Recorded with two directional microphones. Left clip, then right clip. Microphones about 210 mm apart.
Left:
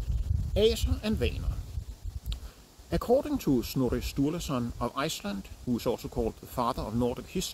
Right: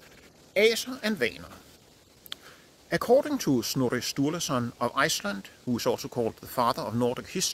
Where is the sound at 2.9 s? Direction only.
25° right (ahead or behind).